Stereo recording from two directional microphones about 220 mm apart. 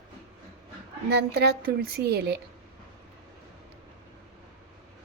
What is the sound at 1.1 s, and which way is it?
A woman's voice, 50° right (ahead or behind).